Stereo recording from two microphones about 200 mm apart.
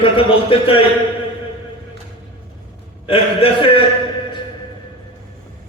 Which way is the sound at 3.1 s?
25° left (ahead or behind).